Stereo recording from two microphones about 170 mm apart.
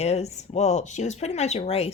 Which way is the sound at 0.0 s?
40° left (ahead or behind).